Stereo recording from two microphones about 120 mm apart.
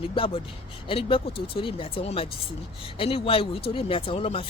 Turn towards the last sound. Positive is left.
turn(degrees=50)  # may be behind; listen again after turning